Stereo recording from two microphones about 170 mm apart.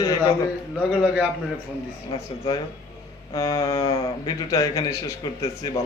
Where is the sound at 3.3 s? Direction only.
20° left (ahead or behind).